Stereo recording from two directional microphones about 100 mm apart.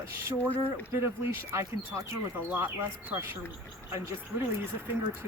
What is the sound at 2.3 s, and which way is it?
Speech, 15° right (ahead or behind).